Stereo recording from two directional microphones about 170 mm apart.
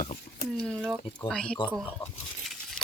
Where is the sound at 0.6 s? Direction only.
5° left (ahead or behind).